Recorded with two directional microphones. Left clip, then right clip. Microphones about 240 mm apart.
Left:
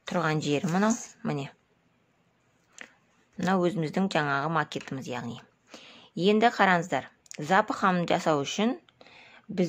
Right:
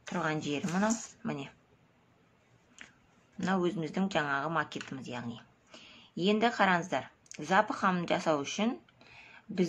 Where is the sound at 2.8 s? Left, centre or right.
Left.